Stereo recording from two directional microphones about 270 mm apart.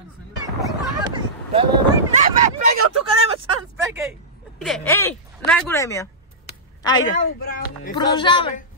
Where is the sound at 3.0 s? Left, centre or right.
Right.